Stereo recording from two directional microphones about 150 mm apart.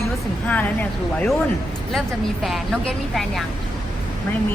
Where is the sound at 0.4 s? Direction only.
10° left (ahead or behind).